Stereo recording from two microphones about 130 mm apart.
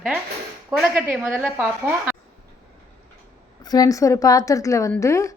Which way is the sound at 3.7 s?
30° left (ahead or behind).